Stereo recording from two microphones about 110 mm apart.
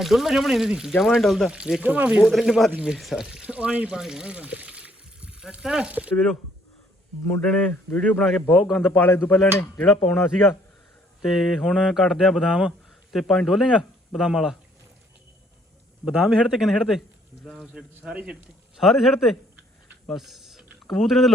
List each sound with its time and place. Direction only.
0.0 s speech: centre (ahead or behind)
2.2 s speech: centre (ahead or behind)
7.7 s speech: 15° left (ahead or behind)
8.2 s speech: centre (ahead or behind)
9.0 s speech: 15° left (ahead or behind); by 14.6 s 5° right (ahead or behind)
16.0 s speech: 5° right (ahead or behind)
20.1 s typing: centre (ahead or behind)
20.9 s speech: centre (ahead or behind)